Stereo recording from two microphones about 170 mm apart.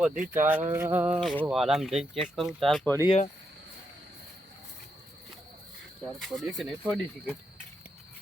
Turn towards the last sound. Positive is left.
turn(degrees=0)  # may be behind; listen again after turning